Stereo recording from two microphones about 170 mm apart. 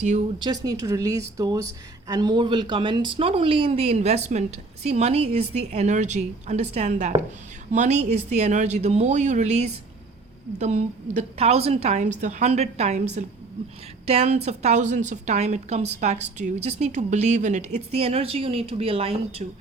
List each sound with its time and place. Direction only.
0.0 s speech: 45° right (ahead or behind)
0.3 s a woman's voice: 25° right (ahead or behind)